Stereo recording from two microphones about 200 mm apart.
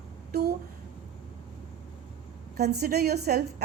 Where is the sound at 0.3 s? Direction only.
50° right (ahead or behind).